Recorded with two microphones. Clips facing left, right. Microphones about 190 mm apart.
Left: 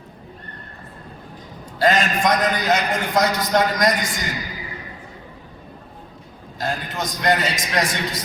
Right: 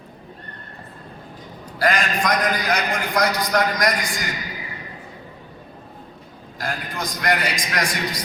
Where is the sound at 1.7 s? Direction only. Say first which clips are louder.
Left 3 dB; 25° left (ahead or behind).